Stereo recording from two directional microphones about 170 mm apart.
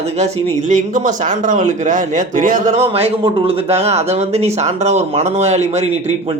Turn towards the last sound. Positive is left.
turn(degrees=-40)  # may be behind; listen again after turning